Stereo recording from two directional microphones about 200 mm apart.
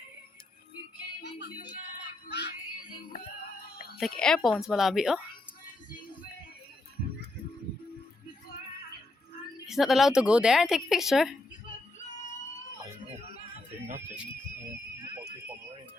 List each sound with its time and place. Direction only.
1.2 s music: 55° left (ahead or behind)
3.9 s speech: centre (ahead or behind)
9.6 s speech: centre (ahead or behind)